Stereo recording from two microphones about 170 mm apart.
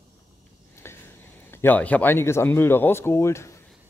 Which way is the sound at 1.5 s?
10° left (ahead or behind).